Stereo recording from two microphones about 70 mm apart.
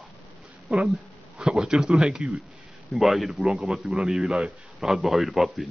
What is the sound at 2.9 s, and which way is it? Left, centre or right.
A man's voice, centre.